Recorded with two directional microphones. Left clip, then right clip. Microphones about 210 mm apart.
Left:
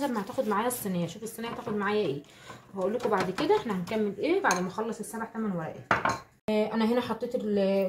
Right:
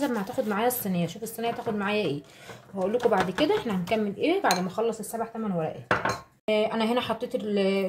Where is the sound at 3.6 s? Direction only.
30° right (ahead or behind).